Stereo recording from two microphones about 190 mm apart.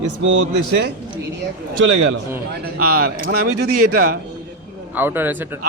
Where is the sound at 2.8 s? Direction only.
55° right (ahead or behind).